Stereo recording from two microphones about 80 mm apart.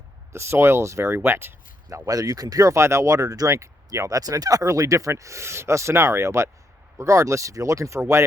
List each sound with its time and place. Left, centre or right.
0.3 s speech: right
1.9 s speech: right